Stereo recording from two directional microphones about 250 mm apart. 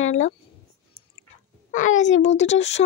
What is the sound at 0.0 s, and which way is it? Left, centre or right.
Speech, left.